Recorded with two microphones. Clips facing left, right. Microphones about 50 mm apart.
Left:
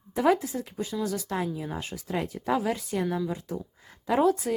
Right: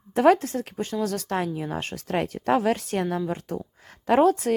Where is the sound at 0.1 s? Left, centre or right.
Right.